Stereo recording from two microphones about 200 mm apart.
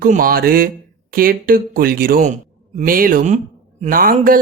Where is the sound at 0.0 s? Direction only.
45° right (ahead or behind).